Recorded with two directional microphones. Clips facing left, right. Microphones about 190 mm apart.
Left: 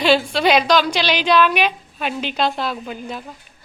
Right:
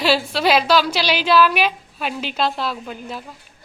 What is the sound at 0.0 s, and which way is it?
A woman's voice, 5° right (ahead or behind).